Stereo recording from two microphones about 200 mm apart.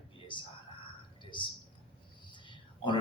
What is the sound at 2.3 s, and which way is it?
Whispering, 25° left (ahead or behind).